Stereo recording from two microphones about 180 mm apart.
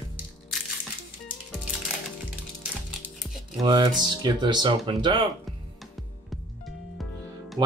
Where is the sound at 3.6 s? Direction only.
25° right (ahead or behind).